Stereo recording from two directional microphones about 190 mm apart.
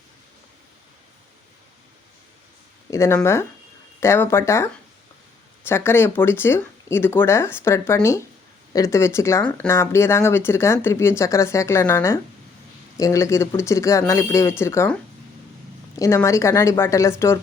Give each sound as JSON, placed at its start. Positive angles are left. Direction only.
{"t": 2.9, "sound": "speech", "side_deg": 15}
{"t": 16.0, "sound": "speech", "side_deg": 15}